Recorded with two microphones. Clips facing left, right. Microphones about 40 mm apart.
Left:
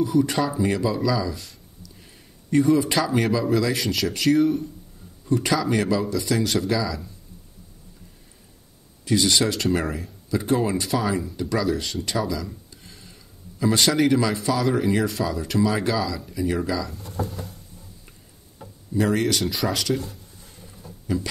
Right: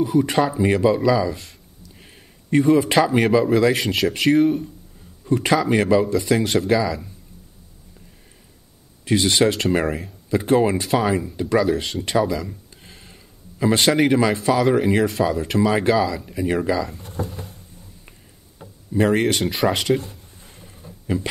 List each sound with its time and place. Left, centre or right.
0.0 s speech: right
1.4 s a sound: right
3.2 s speech: right
6.4 s speech: centre
9.0 s speech: right
12.6 s a sound: right
14.4 s speech: right
18.9 s speech: right
20.5 s a sound: right